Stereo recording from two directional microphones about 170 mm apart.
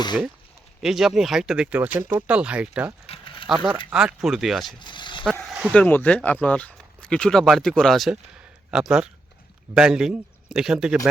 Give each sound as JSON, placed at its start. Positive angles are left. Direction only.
{"t": 0.8, "sound": "speech", "side_deg": -5}
{"t": 3.1, "sound": "a sound", "side_deg": 30}
{"t": 3.8, "sound": "a man's voice", "side_deg": -5}
{"t": 4.8, "sound": "a sound", "side_deg": 25}
{"t": 5.2, "sound": "speech", "side_deg": 0}
{"t": 5.7, "sound": "a man's voice", "side_deg": 10}